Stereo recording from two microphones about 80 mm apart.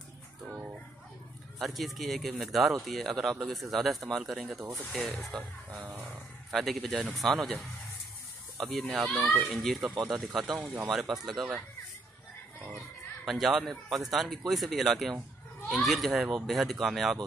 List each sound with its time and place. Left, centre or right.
0.5 s music: centre
1.6 s speech: centre
13.2 s speech: centre